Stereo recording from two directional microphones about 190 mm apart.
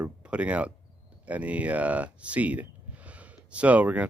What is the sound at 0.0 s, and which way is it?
Speech, 5° right (ahead or behind).